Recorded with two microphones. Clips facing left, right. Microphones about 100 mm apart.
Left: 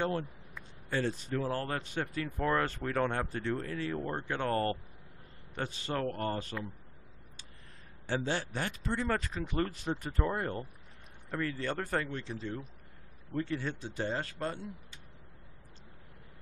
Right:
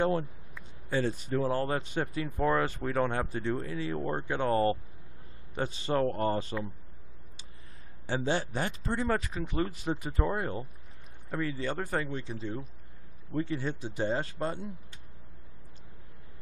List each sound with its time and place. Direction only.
0.8 s speech: 5° right (ahead or behind)
1.4 s speech: 20° right (ahead or behind)
8.2 s speech: 20° right (ahead or behind)